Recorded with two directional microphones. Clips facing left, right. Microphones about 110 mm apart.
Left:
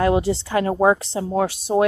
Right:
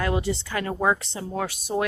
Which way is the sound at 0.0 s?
30° left (ahead or behind).